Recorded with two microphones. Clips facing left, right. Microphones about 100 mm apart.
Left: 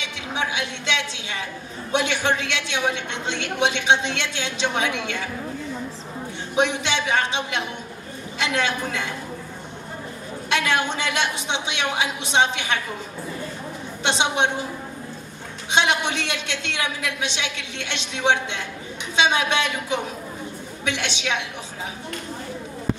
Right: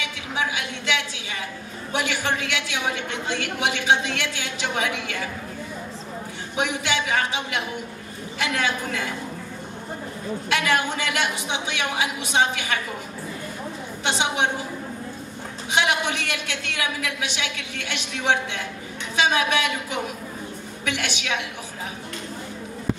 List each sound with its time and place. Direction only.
0.3 s a woman's voice: 20° left (ahead or behind)
6.5 s a woman's voice: 20° left (ahead or behind)
10.5 s a woman's voice: 20° left (ahead or behind)
14.0 s a woman's voice: 20° left (ahead or behind)
15.7 s a woman's voice: 20° left (ahead or behind)